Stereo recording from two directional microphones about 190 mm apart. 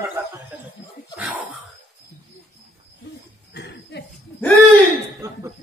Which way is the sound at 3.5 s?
60° left (ahead or behind).